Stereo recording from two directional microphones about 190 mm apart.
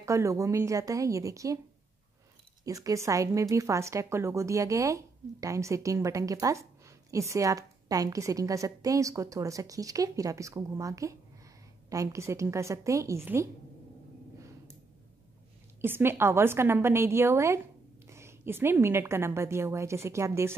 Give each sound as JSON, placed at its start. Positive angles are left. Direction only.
{"t": 0.0, "sound": "speech", "side_deg": -15}
{"t": 2.6, "sound": "speech", "side_deg": -20}
{"t": 15.8, "sound": "speech", "side_deg": -10}